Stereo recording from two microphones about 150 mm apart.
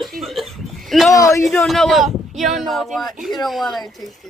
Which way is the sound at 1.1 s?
20° left (ahead or behind).